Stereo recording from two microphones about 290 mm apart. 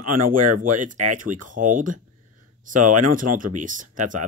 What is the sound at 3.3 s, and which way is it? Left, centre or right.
Speech, right.